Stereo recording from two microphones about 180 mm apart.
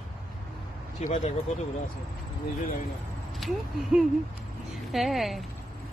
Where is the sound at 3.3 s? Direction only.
Centre (ahead or behind).